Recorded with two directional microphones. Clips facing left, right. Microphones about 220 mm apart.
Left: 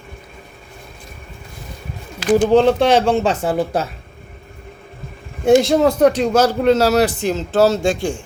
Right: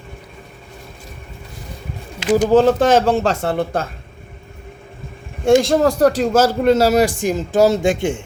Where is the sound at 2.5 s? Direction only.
5° right (ahead or behind).